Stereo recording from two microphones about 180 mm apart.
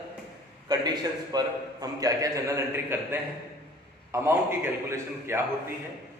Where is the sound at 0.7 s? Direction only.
20° right (ahead or behind).